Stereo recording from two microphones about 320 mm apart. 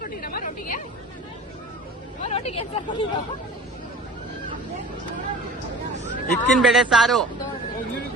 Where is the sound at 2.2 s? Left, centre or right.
Centre.